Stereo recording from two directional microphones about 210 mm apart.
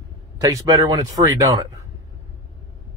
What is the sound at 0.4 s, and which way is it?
Speech, 15° right (ahead or behind).